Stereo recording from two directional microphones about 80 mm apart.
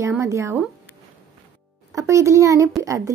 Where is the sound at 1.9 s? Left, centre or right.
Right.